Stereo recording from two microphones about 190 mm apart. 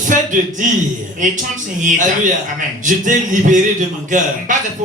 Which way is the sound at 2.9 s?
45° right (ahead or behind).